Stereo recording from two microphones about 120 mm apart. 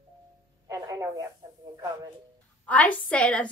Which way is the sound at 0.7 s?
30° right (ahead or behind).